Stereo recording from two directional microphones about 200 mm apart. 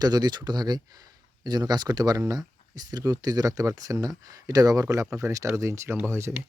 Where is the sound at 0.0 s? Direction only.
20° right (ahead or behind).